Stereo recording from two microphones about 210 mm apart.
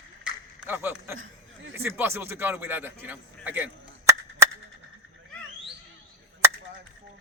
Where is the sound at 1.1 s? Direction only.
70° right (ahead or behind).